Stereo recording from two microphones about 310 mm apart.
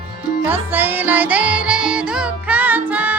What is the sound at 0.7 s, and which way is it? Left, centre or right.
Music, centre.